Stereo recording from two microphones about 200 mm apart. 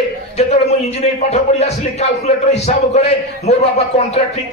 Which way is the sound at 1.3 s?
35° left (ahead or behind).